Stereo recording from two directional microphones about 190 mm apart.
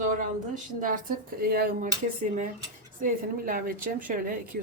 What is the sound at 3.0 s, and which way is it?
Speech, 50° right (ahead or behind).